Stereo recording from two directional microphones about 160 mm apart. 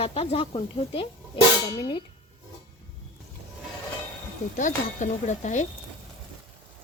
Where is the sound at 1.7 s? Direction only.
25° left (ahead or behind).